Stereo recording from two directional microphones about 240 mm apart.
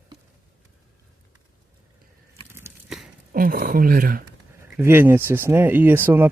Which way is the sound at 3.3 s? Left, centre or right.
Right.